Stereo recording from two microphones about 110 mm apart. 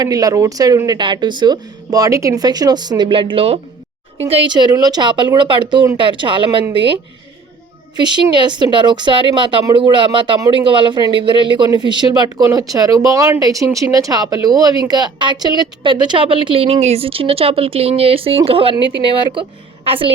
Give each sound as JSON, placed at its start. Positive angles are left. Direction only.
{"t": 0.0, "sound": "speech", "side_deg": -35}
{"t": 4.4, "sound": "speech", "side_deg": -40}
{"t": 7.9, "sound": "speech", "side_deg": -45}
{"t": 16.8, "sound": "speech", "side_deg": -65}